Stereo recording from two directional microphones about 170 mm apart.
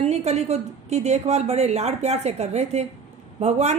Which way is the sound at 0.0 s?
40° right (ahead or behind).